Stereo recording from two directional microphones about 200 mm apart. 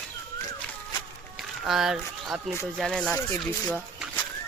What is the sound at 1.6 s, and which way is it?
Speech, centre (ahead or behind).